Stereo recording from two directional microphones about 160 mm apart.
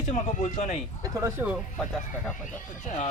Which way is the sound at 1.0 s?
15° right (ahead or behind).